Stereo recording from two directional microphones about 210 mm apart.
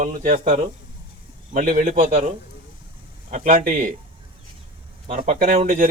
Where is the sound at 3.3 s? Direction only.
40° right (ahead or behind).